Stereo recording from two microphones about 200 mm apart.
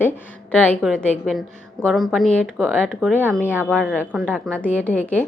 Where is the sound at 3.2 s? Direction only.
10° left (ahead or behind).